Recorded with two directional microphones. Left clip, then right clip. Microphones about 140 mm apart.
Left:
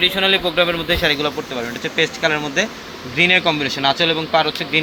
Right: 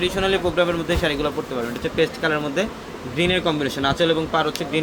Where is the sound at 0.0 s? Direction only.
15° left (ahead or behind).